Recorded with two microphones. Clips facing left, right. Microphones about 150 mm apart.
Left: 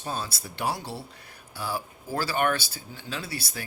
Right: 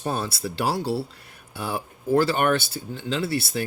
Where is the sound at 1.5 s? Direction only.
60° right (ahead or behind).